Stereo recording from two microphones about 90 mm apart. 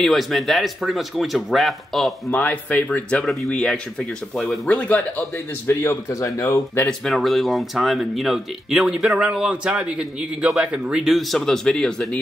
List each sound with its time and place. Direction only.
0.0 s speech: centre (ahead or behind)
2.3 s speech: 15° left (ahead or behind)
5.7 s speech: 30° left (ahead or behind)
6.9 s speech: 5° left (ahead or behind)
11.1 s speech: 5° left (ahead or behind)